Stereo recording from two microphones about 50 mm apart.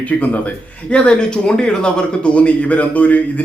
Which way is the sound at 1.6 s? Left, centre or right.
Left.